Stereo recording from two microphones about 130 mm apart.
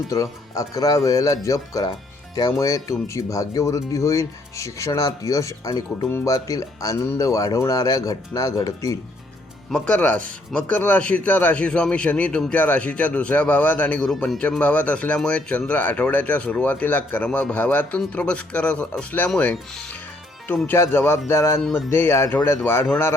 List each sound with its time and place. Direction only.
0.1 s speech: 25° left (ahead or behind)
9.7 s speech: 10° left (ahead or behind)
20.5 s speech: 15° left (ahead or behind)
21.6 s speech: 5° left (ahead or behind)
21.8 s speech: 15° left (ahead or behind)